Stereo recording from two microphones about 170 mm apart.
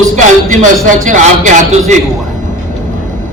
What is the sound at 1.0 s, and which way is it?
Speech, 45° right (ahead or behind).